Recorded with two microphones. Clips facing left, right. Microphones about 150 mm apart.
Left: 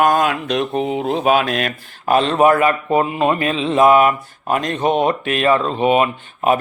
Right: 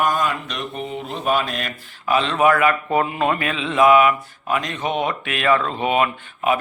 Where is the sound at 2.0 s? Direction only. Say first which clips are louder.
Left 4 dB; 45° left (ahead or behind); by 6.1 s 25° left (ahead or behind).